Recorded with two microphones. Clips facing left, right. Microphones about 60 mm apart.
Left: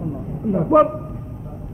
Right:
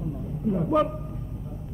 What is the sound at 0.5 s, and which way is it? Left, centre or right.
Speech, left.